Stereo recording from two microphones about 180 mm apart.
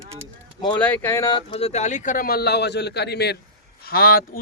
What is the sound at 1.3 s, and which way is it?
A man's voice, 30° left (ahead or behind).